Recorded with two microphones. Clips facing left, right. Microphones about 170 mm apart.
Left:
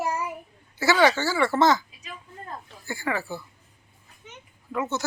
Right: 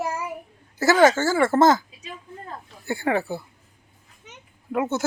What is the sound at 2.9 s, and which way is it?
Speech, 60° right (ahead or behind).